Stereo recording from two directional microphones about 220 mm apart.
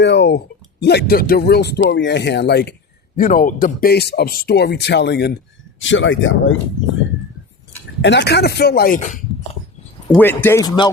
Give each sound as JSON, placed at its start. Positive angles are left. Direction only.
{"t": 0.0, "sound": "speech", "side_deg": 50}
{"t": 3.2, "sound": "speech", "side_deg": 40}
{"t": 8.0, "sound": "speech", "side_deg": 50}
{"t": 10.2, "sound": "speech", "side_deg": 10}